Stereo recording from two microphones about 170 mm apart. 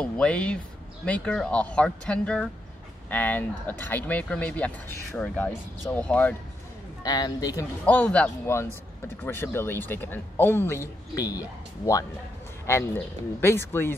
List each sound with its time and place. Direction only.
0.0 s speech: 5° left (ahead or behind)
7.0 s speech: 25° left (ahead or behind)
7.8 s speech: 10° left (ahead or behind)